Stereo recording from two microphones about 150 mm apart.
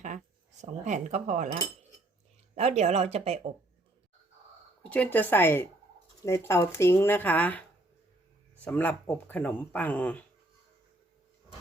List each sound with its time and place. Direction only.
0.6 s speech: 50° right (ahead or behind)
2.6 s speech: 45° right (ahead or behind)
4.8 s speech: 10° left (ahead or behind)
8.6 s speech: 10° left (ahead or behind)